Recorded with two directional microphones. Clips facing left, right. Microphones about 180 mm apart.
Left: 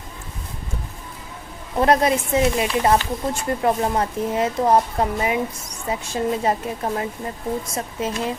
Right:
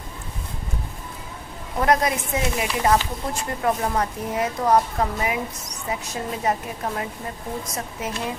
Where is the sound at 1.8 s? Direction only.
30° left (ahead or behind).